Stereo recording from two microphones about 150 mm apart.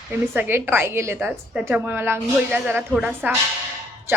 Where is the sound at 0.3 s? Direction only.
15° right (ahead or behind).